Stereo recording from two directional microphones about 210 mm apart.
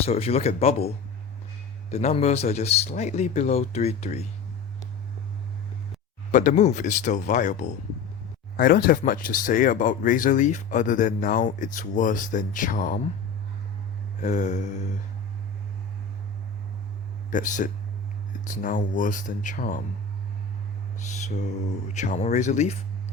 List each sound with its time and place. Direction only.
0.0 s speech: 30° left (ahead or behind)
1.9 s speech: 30° left (ahead or behind)
6.3 s speech: 35° left (ahead or behind)
14.2 s speech: 35° left (ahead or behind)
17.3 s speech: 35° left (ahead or behind)
21.9 s speech: 35° left (ahead or behind)